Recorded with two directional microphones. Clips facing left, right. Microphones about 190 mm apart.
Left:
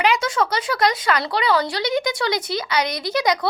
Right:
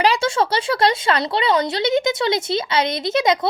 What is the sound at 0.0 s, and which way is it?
Speech, 30° right (ahead or behind).